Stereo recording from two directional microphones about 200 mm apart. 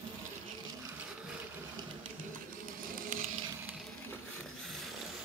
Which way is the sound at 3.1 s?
45° right (ahead or behind).